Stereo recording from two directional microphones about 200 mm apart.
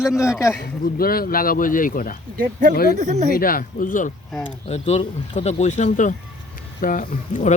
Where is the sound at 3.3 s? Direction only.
45° left (ahead or behind).